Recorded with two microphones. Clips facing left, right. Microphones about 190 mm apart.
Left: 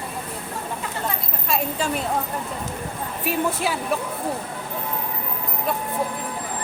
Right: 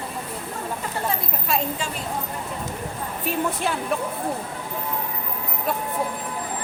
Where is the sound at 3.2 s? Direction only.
5° left (ahead or behind).